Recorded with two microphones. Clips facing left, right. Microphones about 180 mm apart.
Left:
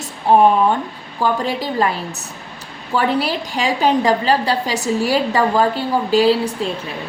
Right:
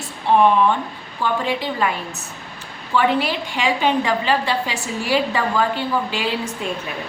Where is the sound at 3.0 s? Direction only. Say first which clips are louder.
Left 1 dB; 40° left (ahead or behind).